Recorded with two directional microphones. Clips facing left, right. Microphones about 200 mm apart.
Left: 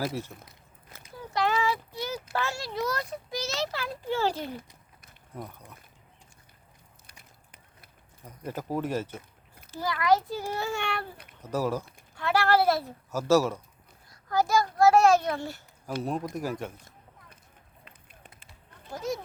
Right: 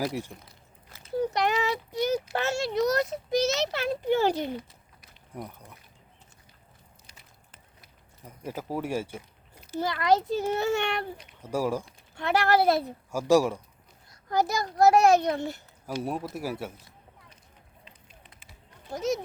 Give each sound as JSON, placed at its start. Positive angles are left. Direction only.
{"t": 0.1, "sound": "speech", "side_deg": -15}
{"t": 1.2, "sound": "child singing", "side_deg": -20}
{"t": 2.4, "sound": "a child's voice", "side_deg": -25}
{"t": 8.2, "sound": "speech", "side_deg": -10}
{"t": 9.7, "sound": "a child's voice", "side_deg": -25}
{"t": 11.4, "sound": "a child's voice", "side_deg": -10}
{"t": 16.0, "sound": "speech", "side_deg": -10}
{"t": 17.8, "sound": "run", "side_deg": 55}
{"t": 18.3, "sound": "a sound", "side_deg": -5}